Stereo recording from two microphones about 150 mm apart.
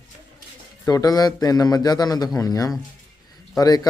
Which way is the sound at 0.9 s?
25° left (ahead or behind).